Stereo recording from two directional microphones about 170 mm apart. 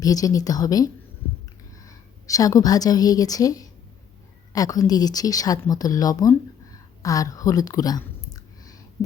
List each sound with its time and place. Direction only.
0.0 s speech: 20° left (ahead or behind)
2.2 s speech: 20° left (ahead or behind)
7.0 s a sound: 20° left (ahead or behind)